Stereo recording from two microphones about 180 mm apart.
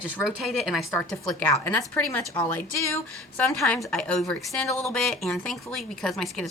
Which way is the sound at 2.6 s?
15° left (ahead or behind).